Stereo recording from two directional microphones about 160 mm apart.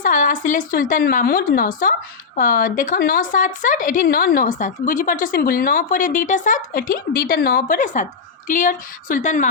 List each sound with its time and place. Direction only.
0.0 s a woman's voice: 55° left (ahead or behind)